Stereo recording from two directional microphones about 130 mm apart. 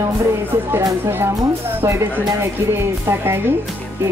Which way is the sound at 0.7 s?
20° right (ahead or behind).